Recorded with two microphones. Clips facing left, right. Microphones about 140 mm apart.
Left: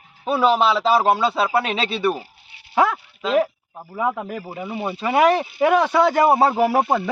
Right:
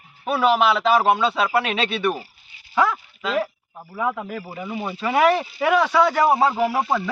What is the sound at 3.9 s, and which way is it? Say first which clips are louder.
Speech: left 2 dB; 20° left (ahead or behind).